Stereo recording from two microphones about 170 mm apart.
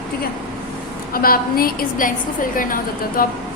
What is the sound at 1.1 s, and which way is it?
A woman's voice, 60° left (ahead or behind).